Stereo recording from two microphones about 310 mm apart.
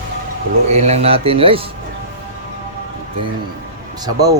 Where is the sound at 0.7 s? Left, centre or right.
Right.